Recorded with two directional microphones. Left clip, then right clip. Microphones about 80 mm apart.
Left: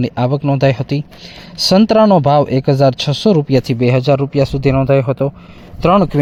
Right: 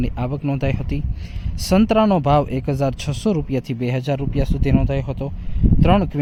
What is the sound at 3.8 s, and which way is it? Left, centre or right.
Speech, left.